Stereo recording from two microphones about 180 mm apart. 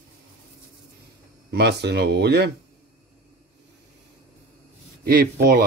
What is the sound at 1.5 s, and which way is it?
Speech, 70° right (ahead or behind).